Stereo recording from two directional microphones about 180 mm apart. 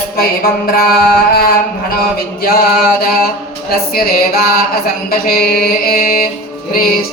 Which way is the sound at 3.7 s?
55° left (ahead or behind).